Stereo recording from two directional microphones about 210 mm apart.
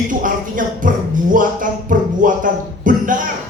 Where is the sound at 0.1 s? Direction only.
40° right (ahead or behind).